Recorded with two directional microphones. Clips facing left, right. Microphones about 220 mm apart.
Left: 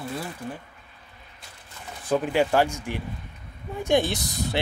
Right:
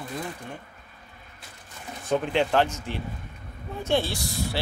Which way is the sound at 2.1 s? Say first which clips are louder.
Left 2 dB; 5° left (ahead or behind).